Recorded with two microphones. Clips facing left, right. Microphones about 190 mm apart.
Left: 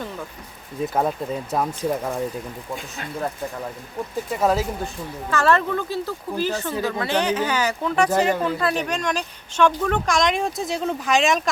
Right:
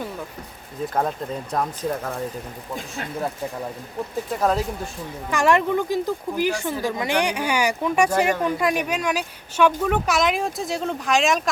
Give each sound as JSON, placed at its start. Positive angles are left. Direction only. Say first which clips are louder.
{"t": 0.9, "sound": "speech", "louder": "left 1 dB", "side_deg": 5}
{"t": 4.3, "sound": "speech", "louder": "left 1 dB", "side_deg": 5}
{"t": 5.3, "sound": "speech", "louder": "right 1 dB", "side_deg": -15}